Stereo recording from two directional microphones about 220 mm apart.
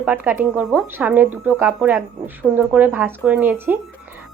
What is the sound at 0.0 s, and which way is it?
Speech, 10° right (ahead or behind).